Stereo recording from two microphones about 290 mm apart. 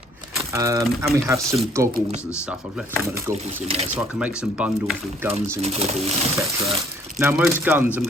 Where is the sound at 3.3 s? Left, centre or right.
Right.